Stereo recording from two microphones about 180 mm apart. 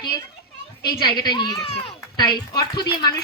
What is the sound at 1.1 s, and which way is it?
Speech, 25° left (ahead or behind).